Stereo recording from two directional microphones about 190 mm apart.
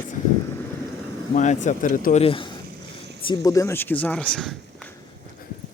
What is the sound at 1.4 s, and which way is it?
Speech, 40° left (ahead or behind).